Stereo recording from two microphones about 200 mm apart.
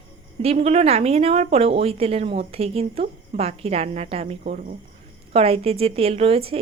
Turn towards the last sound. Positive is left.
turn(degrees=-30)  # may be behind; listen again after turning